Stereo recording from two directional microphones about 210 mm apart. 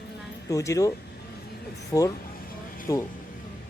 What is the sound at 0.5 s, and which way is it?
Speech, 15° left (ahead or behind).